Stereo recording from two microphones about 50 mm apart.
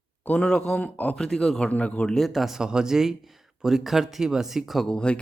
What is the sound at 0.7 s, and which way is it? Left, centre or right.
Speech, left.